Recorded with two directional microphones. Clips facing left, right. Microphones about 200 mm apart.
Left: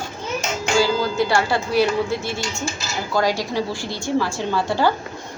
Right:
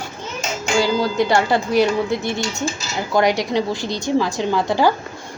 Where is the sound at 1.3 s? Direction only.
20° right (ahead or behind).